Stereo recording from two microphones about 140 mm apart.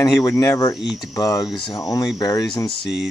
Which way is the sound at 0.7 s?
Centre (ahead or behind).